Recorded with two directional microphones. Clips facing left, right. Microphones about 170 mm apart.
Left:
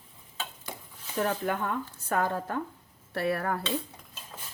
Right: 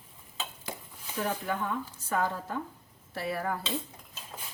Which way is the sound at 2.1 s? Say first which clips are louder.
Left 2 dB; 55° left (ahead or behind).